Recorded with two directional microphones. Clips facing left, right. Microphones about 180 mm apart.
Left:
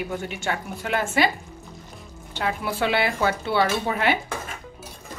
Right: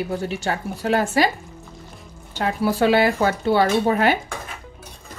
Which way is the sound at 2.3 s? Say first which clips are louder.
Right 5 dB; 40° right (ahead or behind).